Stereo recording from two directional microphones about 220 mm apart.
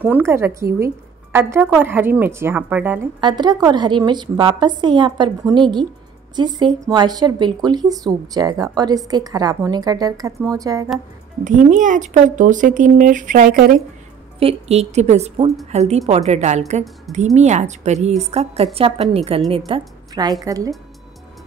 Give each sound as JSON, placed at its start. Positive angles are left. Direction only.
{"t": 0.0, "sound": "a woman's voice", "side_deg": -10}
{"t": 3.2, "sound": "a woman's voice", "side_deg": -20}
{"t": 11.4, "sound": "speech", "side_deg": -35}
{"t": 14.4, "sound": "a woman's voice", "side_deg": -25}